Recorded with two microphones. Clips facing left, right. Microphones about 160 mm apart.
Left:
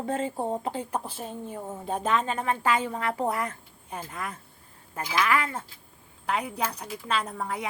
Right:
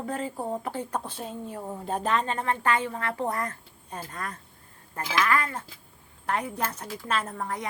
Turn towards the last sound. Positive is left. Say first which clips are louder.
# even
turn(degrees=5)  # may be behind; listen again after turning